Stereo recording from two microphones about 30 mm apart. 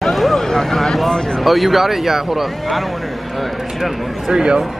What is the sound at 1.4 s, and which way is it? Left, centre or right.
Speech, centre.